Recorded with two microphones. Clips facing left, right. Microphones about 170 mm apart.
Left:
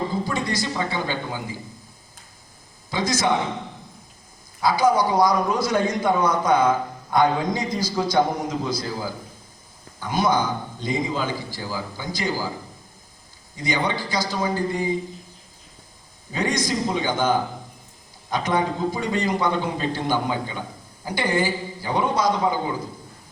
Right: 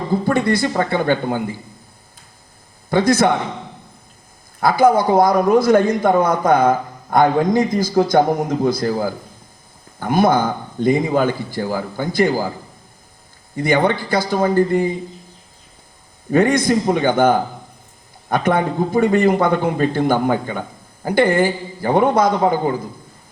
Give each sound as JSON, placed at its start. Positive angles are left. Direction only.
{"t": 0.3, "sound": "a man's voice", "side_deg": -60}
{"t": 2.9, "sound": "a man's voice", "side_deg": -55}
{"t": 4.6, "sound": "a man's voice", "side_deg": -55}
{"t": 13.6, "sound": "a man's voice", "side_deg": -55}
{"t": 16.3, "sound": "a man's voice", "side_deg": -55}